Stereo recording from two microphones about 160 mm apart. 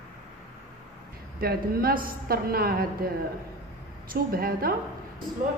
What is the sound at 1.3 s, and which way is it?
A woman's voice, 70° right (ahead or behind).